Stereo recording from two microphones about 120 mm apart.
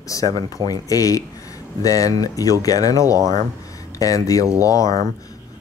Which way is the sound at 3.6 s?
30° left (ahead or behind).